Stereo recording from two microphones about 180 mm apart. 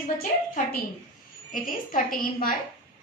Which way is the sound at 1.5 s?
50° left (ahead or behind).